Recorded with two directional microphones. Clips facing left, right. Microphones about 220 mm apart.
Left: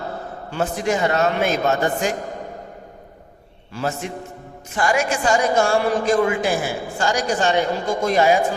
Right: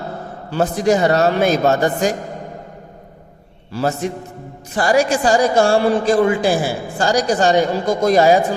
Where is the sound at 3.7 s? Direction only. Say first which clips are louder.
Right 5 dB; 35° right (ahead or behind).